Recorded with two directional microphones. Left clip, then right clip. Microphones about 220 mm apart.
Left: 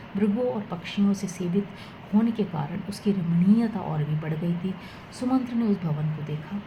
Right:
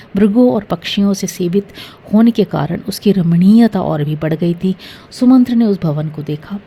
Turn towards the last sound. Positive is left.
turn(degrees=-55)  # may be behind; listen again after turning